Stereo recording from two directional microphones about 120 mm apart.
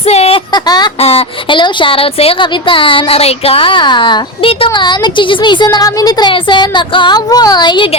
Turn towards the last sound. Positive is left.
turn(degrees=40)  # may be behind; listen again after turning